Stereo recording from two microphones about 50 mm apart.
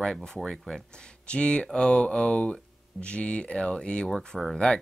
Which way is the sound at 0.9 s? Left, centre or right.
Centre.